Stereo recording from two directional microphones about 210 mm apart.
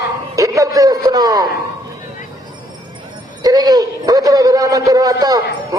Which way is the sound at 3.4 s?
20° right (ahead or behind).